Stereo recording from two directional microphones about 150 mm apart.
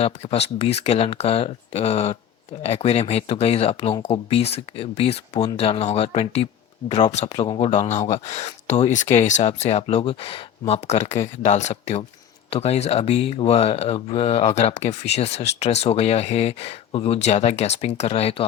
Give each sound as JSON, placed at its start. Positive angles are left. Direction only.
{"t": 0.0, "sound": "speech", "side_deg": 45}
{"t": 7.8, "sound": "speech", "side_deg": 55}